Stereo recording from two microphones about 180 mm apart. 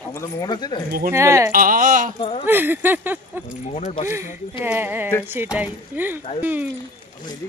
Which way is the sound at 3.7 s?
40° left (ahead or behind).